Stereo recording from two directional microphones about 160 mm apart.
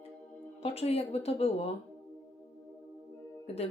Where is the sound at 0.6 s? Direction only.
40° left (ahead or behind).